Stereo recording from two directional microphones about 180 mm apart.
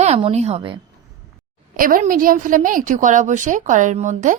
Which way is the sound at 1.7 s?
50° right (ahead or behind).